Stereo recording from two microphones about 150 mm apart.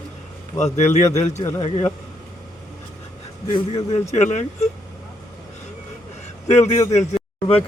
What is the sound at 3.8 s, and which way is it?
Speech, 50° left (ahead or behind).